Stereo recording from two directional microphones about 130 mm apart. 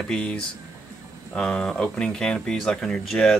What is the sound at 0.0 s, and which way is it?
Speech, 5° left (ahead or behind).